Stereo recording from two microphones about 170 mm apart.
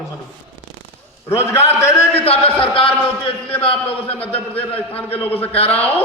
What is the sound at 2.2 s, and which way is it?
Speech, 35° left (ahead or behind).